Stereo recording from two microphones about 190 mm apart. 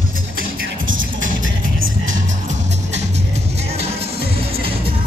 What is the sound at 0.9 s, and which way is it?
Music, 90° right.